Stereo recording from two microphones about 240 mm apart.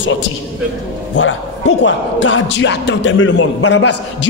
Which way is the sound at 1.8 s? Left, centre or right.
Left.